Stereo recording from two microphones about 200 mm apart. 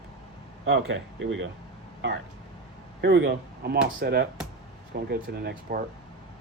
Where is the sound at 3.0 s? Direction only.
60° right (ahead or behind).